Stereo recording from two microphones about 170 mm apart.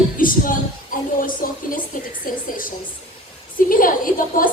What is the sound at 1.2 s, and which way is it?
Speech, 55° left (ahead or behind).